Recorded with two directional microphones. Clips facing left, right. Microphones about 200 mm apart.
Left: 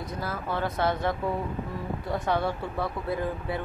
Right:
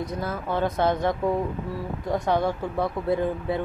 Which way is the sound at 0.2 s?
20° right (ahead or behind).